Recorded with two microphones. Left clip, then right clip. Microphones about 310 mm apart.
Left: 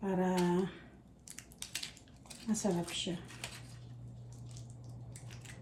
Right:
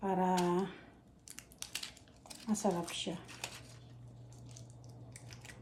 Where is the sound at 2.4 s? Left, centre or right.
Centre.